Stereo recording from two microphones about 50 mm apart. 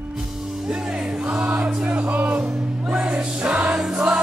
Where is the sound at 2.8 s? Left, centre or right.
Centre.